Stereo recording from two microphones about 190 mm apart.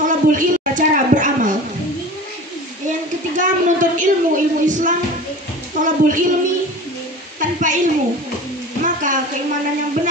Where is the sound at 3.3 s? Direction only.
40° right (ahead or behind).